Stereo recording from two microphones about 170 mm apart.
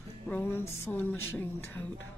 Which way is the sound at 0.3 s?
10° left (ahead or behind).